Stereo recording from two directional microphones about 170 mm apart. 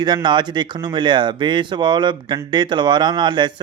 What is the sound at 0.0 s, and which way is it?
A man's voice, 25° right (ahead or behind).